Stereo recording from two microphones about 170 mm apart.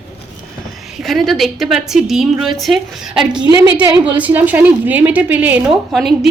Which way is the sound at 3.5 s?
20° right (ahead or behind).